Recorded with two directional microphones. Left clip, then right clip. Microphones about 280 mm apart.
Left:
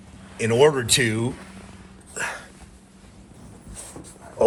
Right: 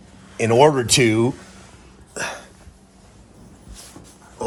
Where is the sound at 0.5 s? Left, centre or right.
Right.